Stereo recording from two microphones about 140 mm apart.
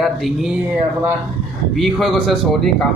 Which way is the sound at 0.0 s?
Centre (ahead or behind).